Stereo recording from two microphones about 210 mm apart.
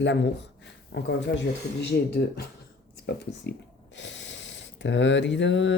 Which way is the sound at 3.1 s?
50° left (ahead or behind).